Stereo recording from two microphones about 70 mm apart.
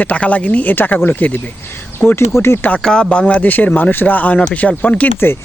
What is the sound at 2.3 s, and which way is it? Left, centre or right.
Speech, left.